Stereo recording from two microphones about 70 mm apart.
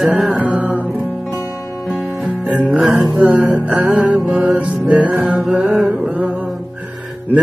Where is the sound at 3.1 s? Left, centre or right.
Right.